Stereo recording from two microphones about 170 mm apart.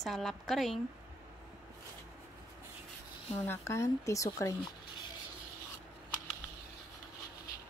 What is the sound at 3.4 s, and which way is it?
Speech, 15° left (ahead or behind).